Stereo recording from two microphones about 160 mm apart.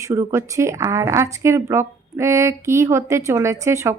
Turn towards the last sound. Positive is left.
turn(degrees=-15)  # may be behind; listen again after turning